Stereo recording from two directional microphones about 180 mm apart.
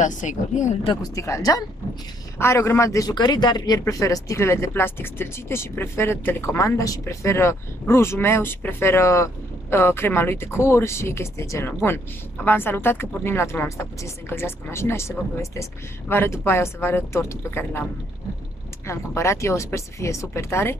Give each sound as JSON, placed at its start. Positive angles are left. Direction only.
{"t": 0.0, "sound": "speech", "side_deg": 45}
{"t": 0.8, "sound": "a man's voice", "side_deg": 20}
{"t": 18.9, "sound": "a man's voice", "side_deg": 15}